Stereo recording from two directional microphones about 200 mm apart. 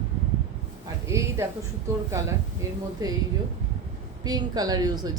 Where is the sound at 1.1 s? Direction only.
15° right (ahead or behind).